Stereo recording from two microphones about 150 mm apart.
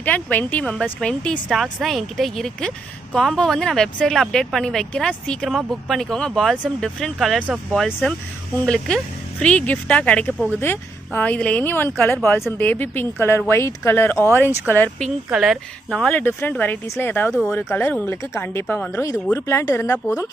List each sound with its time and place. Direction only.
0.0 s a woman's voice: 10° left (ahead or behind)
15.3 s speech: centre (ahead or behind); by 20.2 s 20° left (ahead or behind)